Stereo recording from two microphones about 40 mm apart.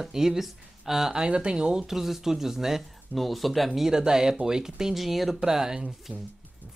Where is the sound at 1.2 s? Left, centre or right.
Right; by 3.9 s centre.